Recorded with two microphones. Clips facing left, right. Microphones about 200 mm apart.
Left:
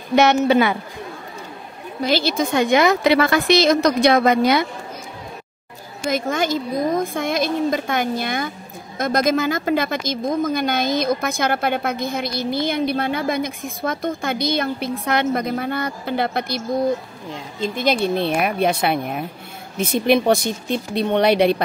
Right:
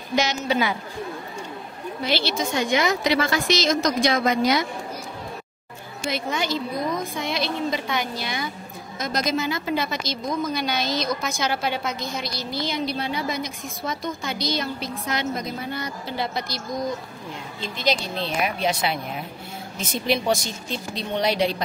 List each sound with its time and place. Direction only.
0.1 s speech: 60° left (ahead or behind)
2.0 s speech: 45° left (ahead or behind)
6.0 s a woman's voice: 45° left (ahead or behind)